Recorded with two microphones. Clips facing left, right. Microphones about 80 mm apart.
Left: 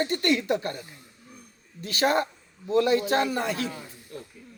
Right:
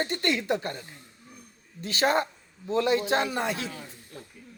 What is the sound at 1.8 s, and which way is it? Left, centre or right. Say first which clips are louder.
Speech: left 1 dB; right.